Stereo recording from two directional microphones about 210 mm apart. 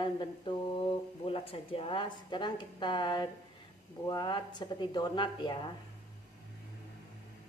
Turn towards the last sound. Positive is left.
turn(degrees=20)  # may be behind; listen again after turning